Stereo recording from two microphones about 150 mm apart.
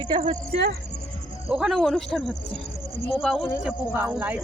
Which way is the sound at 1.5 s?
5° right (ahead or behind).